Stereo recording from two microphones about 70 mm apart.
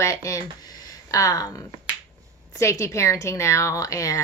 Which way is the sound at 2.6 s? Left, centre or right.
Left.